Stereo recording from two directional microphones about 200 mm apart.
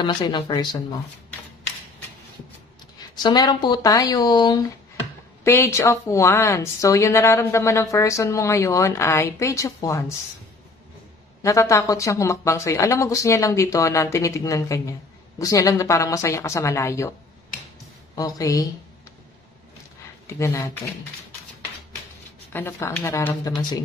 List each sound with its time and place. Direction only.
0.0 s speech: 20° left (ahead or behind)
3.2 s speech: 20° left (ahead or behind)
11.4 s speech: 15° left (ahead or behind)
18.1 s speech: 20° left (ahead or behind)
20.3 s speech: 15° left (ahead or behind)
22.5 s speech: 10° left (ahead or behind)